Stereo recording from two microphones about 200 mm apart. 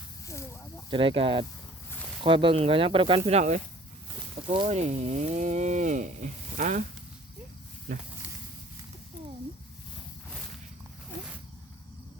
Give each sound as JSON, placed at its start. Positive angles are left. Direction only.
{"t": 0.9, "sound": "speech", "side_deg": -25}
{"t": 7.9, "sound": "speech", "side_deg": -40}